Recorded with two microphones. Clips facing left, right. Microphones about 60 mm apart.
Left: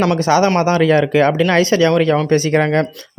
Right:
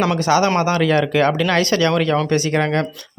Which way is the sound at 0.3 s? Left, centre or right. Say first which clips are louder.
Left 2 dB; left.